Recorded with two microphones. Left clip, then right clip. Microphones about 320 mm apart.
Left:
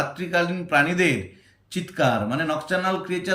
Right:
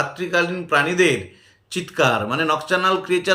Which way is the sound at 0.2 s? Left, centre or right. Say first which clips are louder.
Right 3 dB; centre.